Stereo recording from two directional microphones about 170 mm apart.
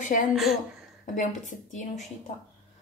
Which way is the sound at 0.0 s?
50° left (ahead or behind).